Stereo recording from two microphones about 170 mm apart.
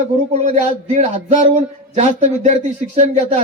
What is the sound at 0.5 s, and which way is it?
A man's voice, 45° right (ahead or behind).